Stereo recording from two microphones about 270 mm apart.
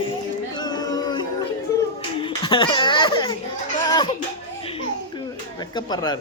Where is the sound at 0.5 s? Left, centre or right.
Centre.